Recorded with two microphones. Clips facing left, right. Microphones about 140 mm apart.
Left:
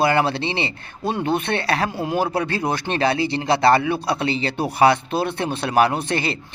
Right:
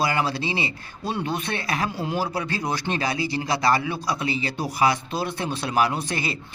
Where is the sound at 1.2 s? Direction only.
60° left (ahead or behind).